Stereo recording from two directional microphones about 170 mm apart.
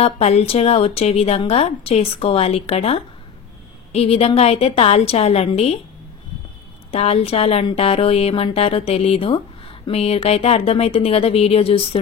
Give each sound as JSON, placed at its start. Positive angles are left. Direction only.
{"t": 0.0, "sound": "speech", "side_deg": 40}
{"t": 6.9, "sound": "speech", "side_deg": 35}